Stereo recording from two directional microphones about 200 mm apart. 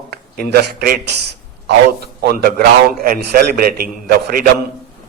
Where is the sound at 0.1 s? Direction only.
50° right (ahead or behind).